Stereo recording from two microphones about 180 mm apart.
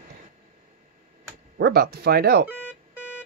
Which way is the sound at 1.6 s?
65° right (ahead or behind).